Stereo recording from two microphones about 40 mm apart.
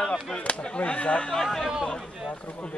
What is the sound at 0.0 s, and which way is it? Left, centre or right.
Chop, centre.